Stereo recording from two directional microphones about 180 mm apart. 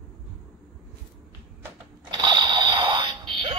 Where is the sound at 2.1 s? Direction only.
25° right (ahead or behind).